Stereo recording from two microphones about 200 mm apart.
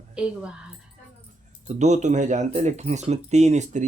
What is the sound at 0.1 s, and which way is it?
Speech, 5° right (ahead or behind).